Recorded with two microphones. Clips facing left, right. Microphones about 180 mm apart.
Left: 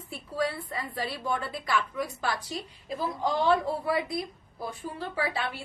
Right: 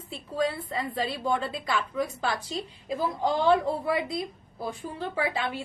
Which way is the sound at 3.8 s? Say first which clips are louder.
Right 1 dB; 25° right (ahead or behind).